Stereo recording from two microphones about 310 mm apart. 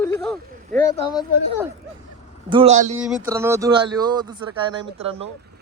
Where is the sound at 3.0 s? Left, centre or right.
Centre.